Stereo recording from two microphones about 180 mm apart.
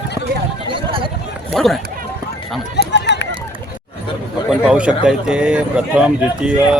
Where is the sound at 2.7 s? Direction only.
75° left (ahead or behind).